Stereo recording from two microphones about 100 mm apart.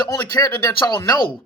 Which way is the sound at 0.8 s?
40° left (ahead or behind).